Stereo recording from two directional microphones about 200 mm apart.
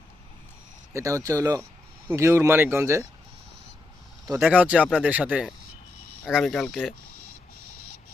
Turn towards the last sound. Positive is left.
turn(degrees=0)  # may be behind; listen again after turning